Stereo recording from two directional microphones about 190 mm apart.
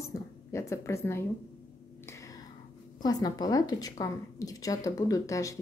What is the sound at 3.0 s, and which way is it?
A woman's voice, 20° left (ahead or behind).